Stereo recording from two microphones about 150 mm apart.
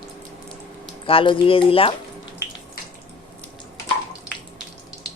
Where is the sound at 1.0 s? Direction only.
35° left (ahead or behind).